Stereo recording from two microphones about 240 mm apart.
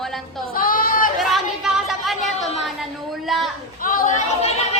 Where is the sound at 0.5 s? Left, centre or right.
Left.